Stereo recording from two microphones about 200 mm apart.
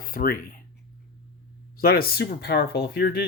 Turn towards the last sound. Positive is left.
turn(degrees=55)  # may be behind; listen again after turning